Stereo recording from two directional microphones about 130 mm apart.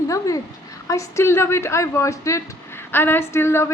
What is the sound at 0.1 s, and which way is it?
A woman's voice, 25° left (ahead or behind).